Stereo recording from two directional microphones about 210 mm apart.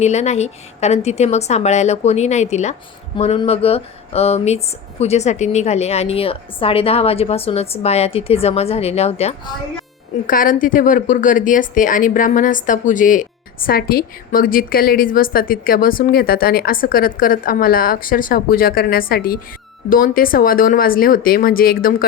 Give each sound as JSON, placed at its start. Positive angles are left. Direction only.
{"t": 0.0, "sound": "a woman's voice", "side_deg": 30}
{"t": 10.2, "sound": "a woman's voice", "side_deg": 40}